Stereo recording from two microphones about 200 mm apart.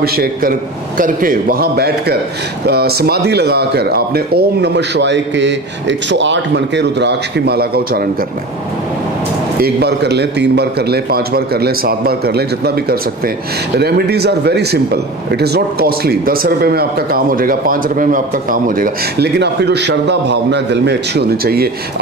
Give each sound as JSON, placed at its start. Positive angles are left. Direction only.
{"t": 0.0, "sound": "speech", "side_deg": -50}
{"t": 9.6, "sound": "speech", "side_deg": -55}